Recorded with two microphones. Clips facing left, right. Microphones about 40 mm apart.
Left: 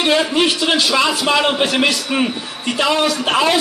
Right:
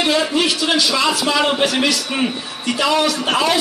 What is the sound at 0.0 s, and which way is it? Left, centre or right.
A man's voice, left.